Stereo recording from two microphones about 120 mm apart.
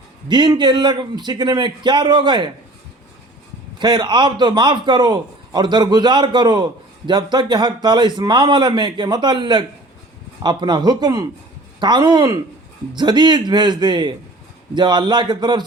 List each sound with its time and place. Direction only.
0.3 s a man's voice: 40° right (ahead or behind)
3.8 s a man's voice: 40° right (ahead or behind)